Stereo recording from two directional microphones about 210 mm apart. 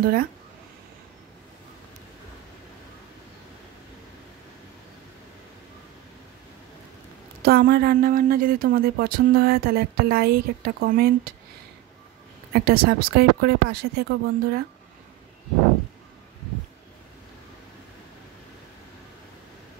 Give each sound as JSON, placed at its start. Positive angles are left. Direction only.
{"t": 7.4, "sound": "speech", "side_deg": -45}
{"t": 12.5, "sound": "speech", "side_deg": -45}